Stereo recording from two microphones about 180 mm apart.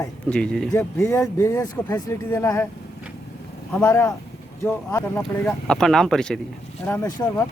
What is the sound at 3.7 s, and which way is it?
Speech, 15° left (ahead or behind).